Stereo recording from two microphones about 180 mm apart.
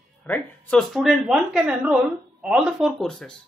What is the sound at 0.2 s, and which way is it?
Speech, 5° left (ahead or behind).